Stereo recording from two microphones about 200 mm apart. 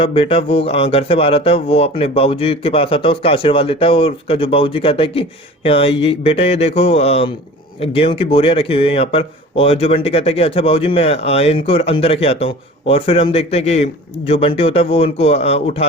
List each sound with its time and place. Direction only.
0.0 s speech: 30° left (ahead or behind)